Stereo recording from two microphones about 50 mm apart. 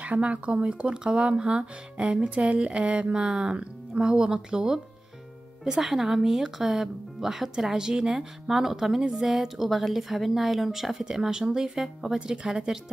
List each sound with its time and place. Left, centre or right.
0.0 s speech: right; by 12.7 s centre